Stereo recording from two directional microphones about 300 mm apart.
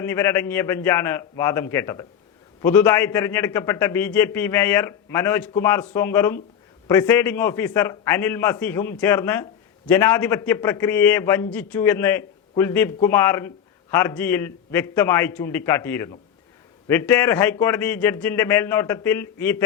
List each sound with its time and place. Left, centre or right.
0.0 s a man's voice: centre